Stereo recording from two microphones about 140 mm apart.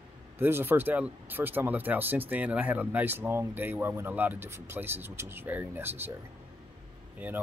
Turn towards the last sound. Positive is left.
turn(degrees=-10)  # may be behind; listen again after turning